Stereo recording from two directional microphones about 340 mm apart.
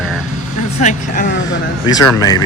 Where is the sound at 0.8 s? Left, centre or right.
Left.